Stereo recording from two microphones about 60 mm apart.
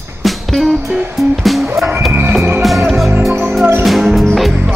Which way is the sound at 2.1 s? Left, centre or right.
Right.